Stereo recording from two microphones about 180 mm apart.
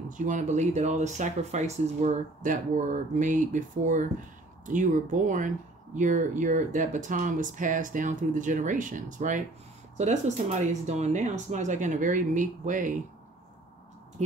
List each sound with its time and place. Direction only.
0.1 s speech: 45° right (ahead or behind)